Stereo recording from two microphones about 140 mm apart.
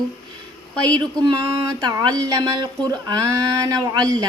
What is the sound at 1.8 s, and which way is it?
Speech, 30° right (ahead or behind).